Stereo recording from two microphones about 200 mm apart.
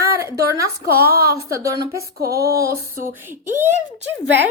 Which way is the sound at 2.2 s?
50° right (ahead or behind).